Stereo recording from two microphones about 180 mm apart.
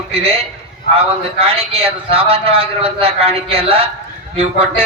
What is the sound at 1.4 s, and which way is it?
A man's voice, 30° right (ahead or behind).